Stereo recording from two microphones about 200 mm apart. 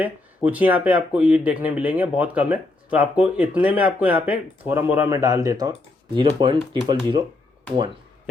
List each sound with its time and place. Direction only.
0.4 s speech: 10° right (ahead or behind); by 7.2 s 25° right (ahead or behind)